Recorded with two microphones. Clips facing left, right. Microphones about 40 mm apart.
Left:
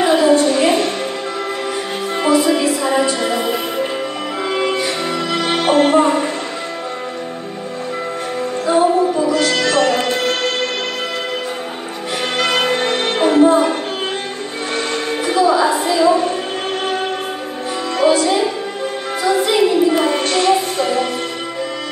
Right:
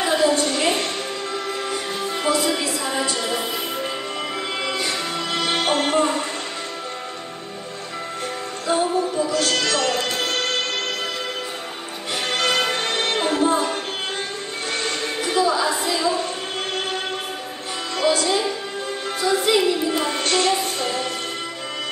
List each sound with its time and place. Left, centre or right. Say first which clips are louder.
0.0 s a sound: left 7 dB; left
2.2 s music: left 8 dB; left
4.6 s music: left 7 dB; left
9.1 s music: left 6 dB; left
12.4 s music: left 5 dB; left
15.2 s music: left 6 dB; left
17.9 s music: left 6 dB; left